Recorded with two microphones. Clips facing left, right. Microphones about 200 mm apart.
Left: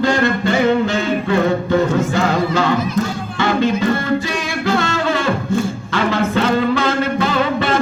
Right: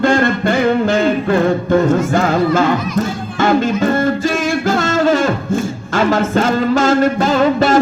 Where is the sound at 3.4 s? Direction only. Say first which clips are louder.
Right 3 dB; 45° right (ahead or behind).